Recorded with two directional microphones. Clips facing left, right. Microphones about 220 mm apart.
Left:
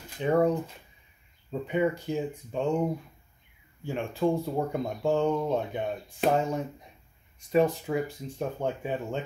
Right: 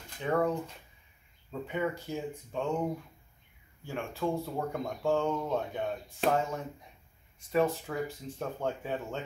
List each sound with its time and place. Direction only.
0.2 s speech: 20° left (ahead or behind)
1.5 s speech: 20° left (ahead or behind)
3.8 s speech: 15° left (ahead or behind)